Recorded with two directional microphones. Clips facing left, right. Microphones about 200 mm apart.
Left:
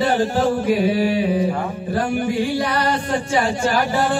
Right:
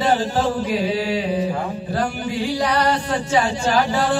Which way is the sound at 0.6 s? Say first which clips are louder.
Left 4 dB; 50° left (ahead or behind).